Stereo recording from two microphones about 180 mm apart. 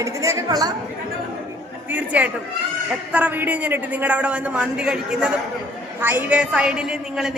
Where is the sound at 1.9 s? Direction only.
10° right (ahead or behind).